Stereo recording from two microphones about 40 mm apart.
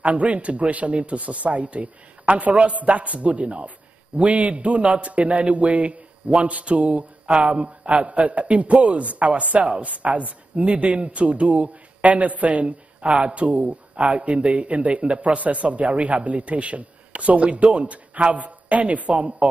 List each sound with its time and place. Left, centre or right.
0.0 s a man's voice: right